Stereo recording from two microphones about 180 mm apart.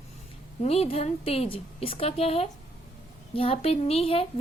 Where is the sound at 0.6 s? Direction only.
35° left (ahead or behind).